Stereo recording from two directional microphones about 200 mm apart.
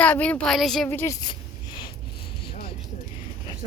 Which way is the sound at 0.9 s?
15° left (ahead or behind).